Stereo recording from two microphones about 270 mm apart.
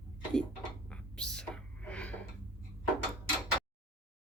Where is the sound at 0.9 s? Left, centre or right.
Centre.